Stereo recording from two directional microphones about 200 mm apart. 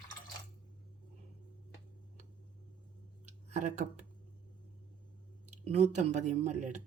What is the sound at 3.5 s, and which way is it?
Speech, 35° right (ahead or behind).